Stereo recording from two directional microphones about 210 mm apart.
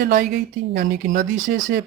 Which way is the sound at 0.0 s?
45° right (ahead or behind).